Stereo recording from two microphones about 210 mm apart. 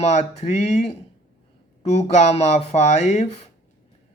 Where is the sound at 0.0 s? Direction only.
30° left (ahead or behind).